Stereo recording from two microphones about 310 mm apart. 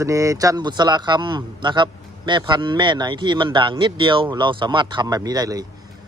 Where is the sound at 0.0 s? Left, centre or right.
Centre.